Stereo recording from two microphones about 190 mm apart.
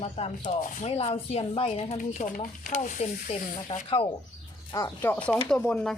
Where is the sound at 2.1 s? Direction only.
45° left (ahead or behind).